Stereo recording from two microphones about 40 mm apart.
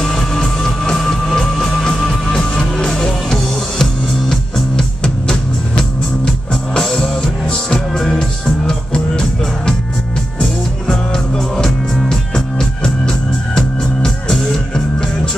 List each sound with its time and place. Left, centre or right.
0.0 s music: centre
7.2 s music: left
7.9 s music: centre
10.9 s music: centre